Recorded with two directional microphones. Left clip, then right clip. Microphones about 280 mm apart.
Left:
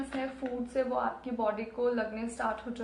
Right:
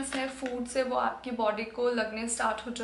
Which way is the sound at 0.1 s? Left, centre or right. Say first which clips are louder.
Right 2 dB; centre.